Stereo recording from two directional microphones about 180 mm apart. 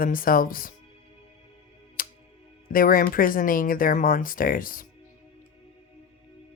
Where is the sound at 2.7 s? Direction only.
50° left (ahead or behind).